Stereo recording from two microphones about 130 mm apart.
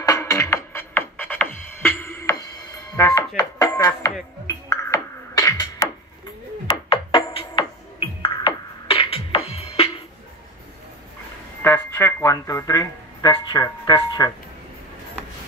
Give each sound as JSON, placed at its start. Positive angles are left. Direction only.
{"t": 0.0, "sound": "music", "side_deg": 25}
{"t": 3.0, "sound": "speech", "side_deg": 25}
{"t": 4.6, "sound": "music", "side_deg": 25}
{"t": 6.7, "sound": "music", "side_deg": 40}
{"t": 11.6, "sound": "music", "side_deg": 20}
{"t": 13.3, "sound": "speech", "side_deg": 35}